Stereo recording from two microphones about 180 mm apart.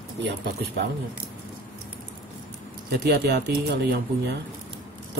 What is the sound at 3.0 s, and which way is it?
Speech, 65° right (ahead or behind).